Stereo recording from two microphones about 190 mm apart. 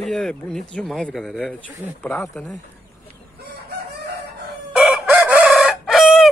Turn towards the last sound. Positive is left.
turn(degrees=0)  # may be behind; listen again after turning